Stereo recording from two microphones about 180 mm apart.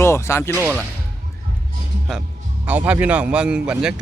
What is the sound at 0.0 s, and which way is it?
Speech, 15° left (ahead or behind).